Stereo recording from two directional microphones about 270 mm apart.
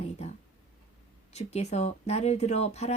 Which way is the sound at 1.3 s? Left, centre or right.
Left.